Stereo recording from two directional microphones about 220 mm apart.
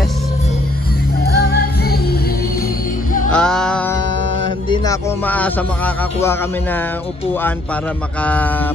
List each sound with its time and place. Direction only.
1.2 s music: 45° left (ahead or behind)
3.3 s music: 5° left (ahead or behind)
5.2 s speech: 5° left (ahead or behind)
8.2 s speech: 5° left (ahead or behind)